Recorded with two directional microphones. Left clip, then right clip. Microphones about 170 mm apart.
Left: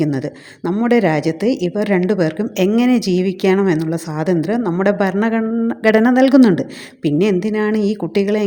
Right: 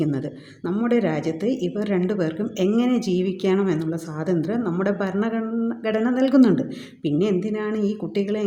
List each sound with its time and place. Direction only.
0.0 s speech: 35° left (ahead or behind)